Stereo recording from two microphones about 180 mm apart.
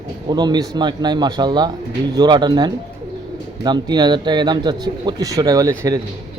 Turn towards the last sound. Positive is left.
turn(degrees=-20)  # may be behind; listen again after turning